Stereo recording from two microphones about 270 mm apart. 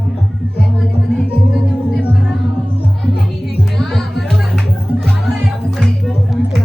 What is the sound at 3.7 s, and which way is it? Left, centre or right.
Music, centre.